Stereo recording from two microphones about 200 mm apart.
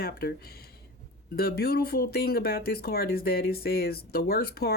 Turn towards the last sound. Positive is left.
turn(degrees=50)  # may be behind; listen again after turning